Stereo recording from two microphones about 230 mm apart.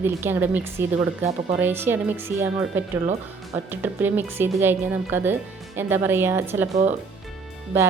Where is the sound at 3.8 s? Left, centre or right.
Centre.